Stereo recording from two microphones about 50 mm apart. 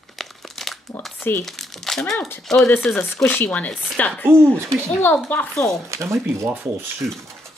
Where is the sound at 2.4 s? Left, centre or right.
Centre.